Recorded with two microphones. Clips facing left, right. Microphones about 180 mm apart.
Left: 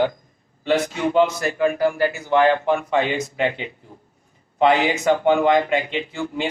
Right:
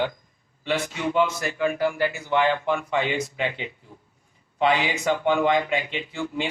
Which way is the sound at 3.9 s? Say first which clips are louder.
Left 3 dB; 45° left (ahead or behind).